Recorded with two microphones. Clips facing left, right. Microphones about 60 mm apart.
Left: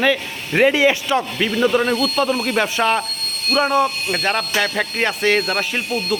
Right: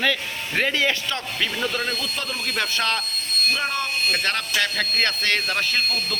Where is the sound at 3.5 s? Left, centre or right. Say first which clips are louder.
Left 9 dB; left.